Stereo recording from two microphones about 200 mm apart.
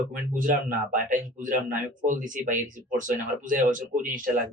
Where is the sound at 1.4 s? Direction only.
40° right (ahead or behind).